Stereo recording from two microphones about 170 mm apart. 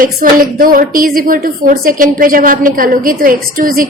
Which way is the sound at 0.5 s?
60° right (ahead or behind).